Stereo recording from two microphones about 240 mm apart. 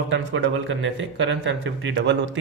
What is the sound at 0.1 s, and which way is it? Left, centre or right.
Speech, right.